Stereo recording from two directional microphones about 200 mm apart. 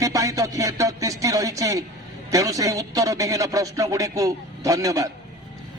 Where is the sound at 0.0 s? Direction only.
15° right (ahead or behind).